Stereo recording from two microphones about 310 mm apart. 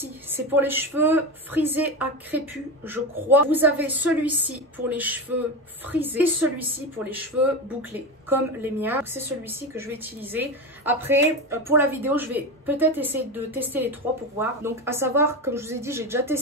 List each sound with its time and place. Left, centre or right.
0.0 s a woman's voice: centre